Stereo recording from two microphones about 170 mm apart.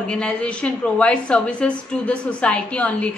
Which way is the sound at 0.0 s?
5° left (ahead or behind).